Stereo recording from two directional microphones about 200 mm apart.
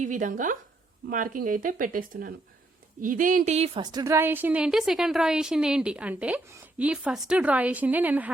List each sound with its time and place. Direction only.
0.0 s a woman's voice: 40° right (ahead or behind); by 8.3 s 10° right (ahead or behind)